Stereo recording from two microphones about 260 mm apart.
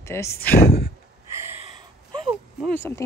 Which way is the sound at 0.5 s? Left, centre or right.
Left.